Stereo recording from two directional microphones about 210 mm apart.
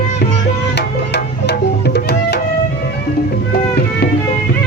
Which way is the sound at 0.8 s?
55° left (ahead or behind).